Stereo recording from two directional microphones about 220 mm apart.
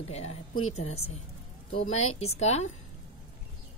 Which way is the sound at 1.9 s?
30° left (ahead or behind).